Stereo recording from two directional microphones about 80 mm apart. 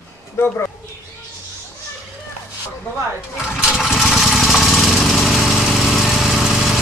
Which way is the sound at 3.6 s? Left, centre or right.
Centre.